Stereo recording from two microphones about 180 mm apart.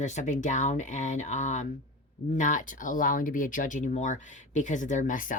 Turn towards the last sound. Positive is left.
turn(degrees=45)  # may be behind; listen again after turning